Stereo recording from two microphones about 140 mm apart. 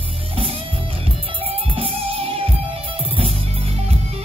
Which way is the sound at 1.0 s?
40° right (ahead or behind).